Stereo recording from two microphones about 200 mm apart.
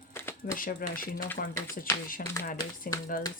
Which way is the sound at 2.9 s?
45° left (ahead or behind).